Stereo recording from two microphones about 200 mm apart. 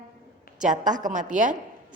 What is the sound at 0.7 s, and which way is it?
Speech, 40° right (ahead or behind).